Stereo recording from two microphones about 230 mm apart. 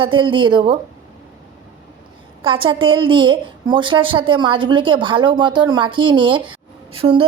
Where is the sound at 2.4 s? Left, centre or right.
Right.